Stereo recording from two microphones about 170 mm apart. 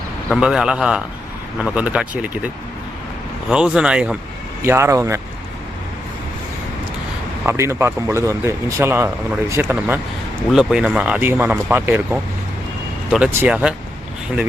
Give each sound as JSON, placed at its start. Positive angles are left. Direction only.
{"t": 0.3, "sound": "speech", "side_deg": -5}
{"t": 3.5, "sound": "speech", "side_deg": -5}
{"t": 7.4, "sound": "speech", "side_deg": -15}